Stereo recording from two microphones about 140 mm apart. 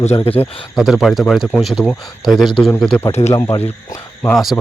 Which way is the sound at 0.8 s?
Centre (ahead or behind).